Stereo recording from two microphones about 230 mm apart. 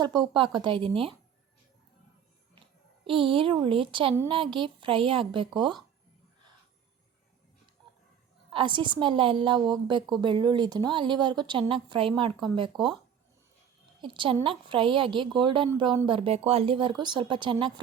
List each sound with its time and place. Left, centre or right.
0.0 s a woman's voice: centre
2.6 s a woman's voice: right
8.5 s a woman's voice: right
14.0 s a woman's voice: right